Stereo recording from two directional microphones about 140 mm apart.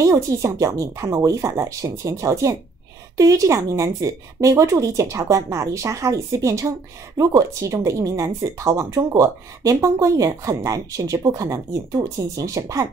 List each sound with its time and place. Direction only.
0.0 s speech: 20° right (ahead or behind)